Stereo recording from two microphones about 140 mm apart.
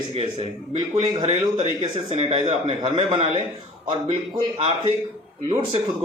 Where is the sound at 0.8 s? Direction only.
30° right (ahead or behind).